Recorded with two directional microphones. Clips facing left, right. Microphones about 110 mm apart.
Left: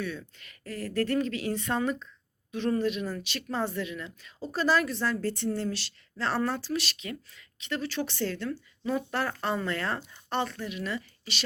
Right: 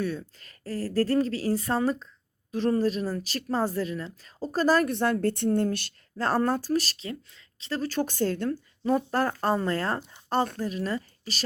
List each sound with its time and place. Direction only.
0.0 s speech: 40° right (ahead or behind)
4.9 s speech: 60° right (ahead or behind); by 11.4 s 40° right (ahead or behind)